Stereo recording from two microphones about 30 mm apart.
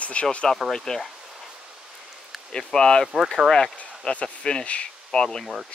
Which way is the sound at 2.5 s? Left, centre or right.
Left.